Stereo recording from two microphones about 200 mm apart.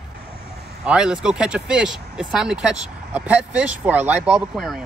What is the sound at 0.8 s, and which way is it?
Speech, 5° right (ahead or behind).